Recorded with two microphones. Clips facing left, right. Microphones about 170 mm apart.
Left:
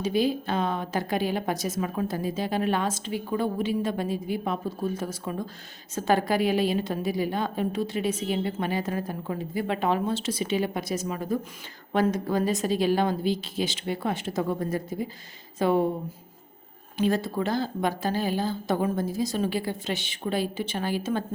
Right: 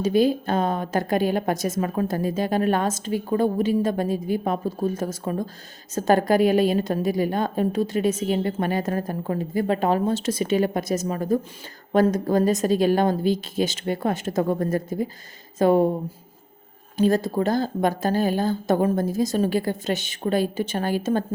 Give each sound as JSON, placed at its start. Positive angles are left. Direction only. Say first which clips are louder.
{"t": 0.0, "sound": "a woman's voice", "louder": "right 5 dB", "side_deg": -45}
{"t": 17.0, "sound": "a woman's voice", "louder": "right 5 dB", "side_deg": -40}